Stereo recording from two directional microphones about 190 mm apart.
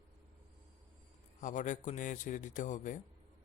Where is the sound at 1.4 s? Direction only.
40° left (ahead or behind).